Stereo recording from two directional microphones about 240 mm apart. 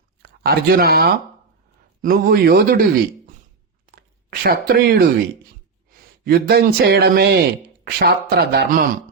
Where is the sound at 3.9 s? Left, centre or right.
Right.